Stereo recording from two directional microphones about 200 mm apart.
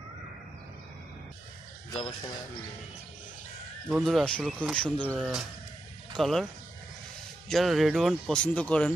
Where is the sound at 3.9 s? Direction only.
Centre (ahead or behind).